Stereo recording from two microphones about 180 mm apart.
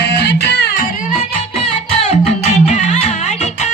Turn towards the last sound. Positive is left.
turn(degrees=40)  # may be behind; listen again after turning